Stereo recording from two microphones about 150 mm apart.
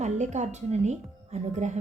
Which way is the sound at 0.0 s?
50° right (ahead or behind).